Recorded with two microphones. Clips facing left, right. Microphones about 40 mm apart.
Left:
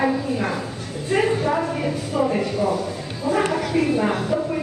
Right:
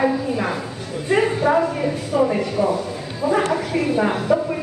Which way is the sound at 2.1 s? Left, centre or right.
Centre.